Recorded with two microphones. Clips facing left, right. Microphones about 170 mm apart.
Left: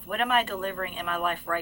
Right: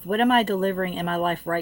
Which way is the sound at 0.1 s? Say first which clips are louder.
Right 7 dB; 40° right (ahead or behind).